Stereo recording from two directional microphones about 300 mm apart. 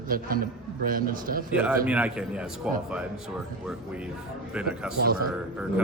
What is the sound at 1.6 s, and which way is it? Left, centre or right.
Speech, centre.